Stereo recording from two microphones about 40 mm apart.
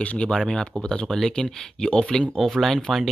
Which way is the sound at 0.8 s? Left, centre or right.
Left.